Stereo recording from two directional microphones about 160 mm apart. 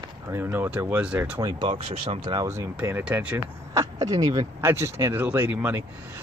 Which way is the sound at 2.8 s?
10° right (ahead or behind).